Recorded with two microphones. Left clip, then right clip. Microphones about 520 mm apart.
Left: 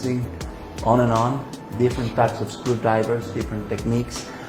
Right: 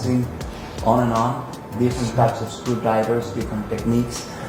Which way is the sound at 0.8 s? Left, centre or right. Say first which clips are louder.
Even; centre.